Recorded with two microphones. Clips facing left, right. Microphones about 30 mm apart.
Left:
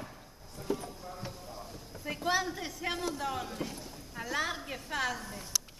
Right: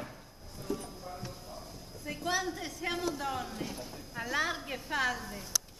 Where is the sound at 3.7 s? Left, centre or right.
Centre.